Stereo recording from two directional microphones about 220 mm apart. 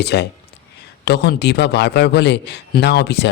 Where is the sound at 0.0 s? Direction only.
50° left (ahead or behind).